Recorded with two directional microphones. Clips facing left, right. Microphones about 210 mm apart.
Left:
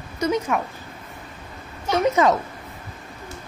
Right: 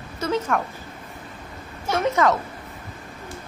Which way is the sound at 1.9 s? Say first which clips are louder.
Left 2 dB; 20° left (ahead or behind).